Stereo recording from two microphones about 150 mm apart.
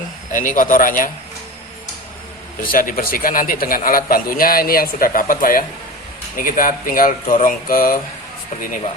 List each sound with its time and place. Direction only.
0.3 s speech: 60° left (ahead or behind)
2.7 s a man's voice: 70° left (ahead or behind)